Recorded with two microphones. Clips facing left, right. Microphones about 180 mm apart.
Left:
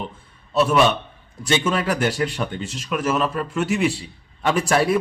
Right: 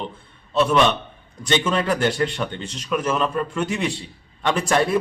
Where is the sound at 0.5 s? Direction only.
5° left (ahead or behind).